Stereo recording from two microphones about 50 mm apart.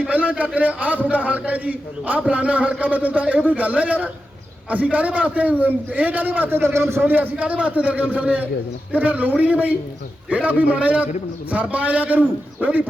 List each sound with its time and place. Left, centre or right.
0.1 s a man's voice: right
6.7 s a man's voice: right
7.0 s a man's voice: right